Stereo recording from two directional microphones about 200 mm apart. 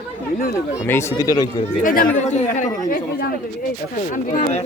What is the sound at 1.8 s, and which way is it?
Speech, 40° left (ahead or behind).